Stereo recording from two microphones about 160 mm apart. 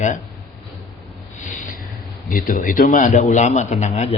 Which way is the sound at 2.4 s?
55° left (ahead or behind).